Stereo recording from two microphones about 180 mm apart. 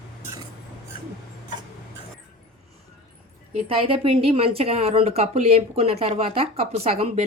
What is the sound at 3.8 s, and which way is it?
Speech, 30° right (ahead or behind).